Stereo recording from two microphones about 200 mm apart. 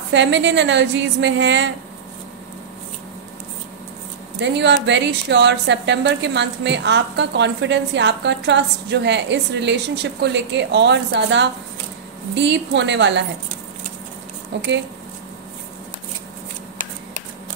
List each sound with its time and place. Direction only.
0.1 s a woman's voice: 65° right (ahead or behind)
4.4 s a woman's voice: 60° right (ahead or behind)
14.5 s a woman's voice: 60° right (ahead or behind)